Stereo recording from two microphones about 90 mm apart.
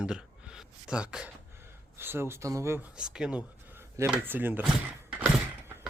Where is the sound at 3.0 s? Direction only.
10° right (ahead or behind).